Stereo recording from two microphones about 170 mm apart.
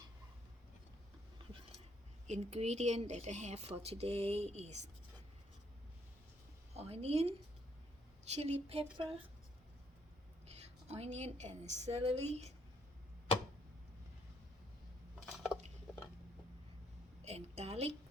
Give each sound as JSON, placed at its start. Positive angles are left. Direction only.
{"t": 2.2, "sound": "speech", "side_deg": -40}
{"t": 6.7, "sound": "speech", "side_deg": -40}
{"t": 8.4, "sound": "speech", "side_deg": -40}
{"t": 10.4, "sound": "a woman's voice", "side_deg": -40}
{"t": 17.2, "sound": "a sound", "side_deg": -40}